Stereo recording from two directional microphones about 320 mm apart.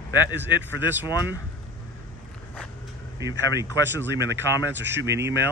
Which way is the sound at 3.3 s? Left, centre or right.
Centre.